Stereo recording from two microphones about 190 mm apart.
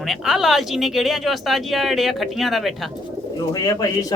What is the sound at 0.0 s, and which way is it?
Speech, centre (ahead or behind).